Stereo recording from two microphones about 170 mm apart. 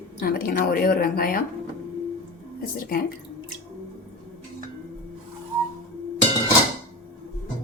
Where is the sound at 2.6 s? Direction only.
60° left (ahead or behind).